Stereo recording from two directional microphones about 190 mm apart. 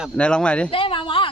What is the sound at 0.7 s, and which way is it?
Speech, 30° left (ahead or behind).